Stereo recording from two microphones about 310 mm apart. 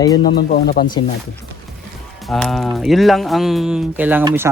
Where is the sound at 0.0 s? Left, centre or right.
Centre.